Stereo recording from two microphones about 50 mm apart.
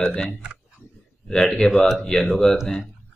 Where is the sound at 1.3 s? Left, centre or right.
Centre.